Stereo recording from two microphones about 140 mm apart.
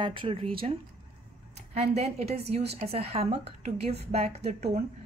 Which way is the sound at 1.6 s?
50° right (ahead or behind).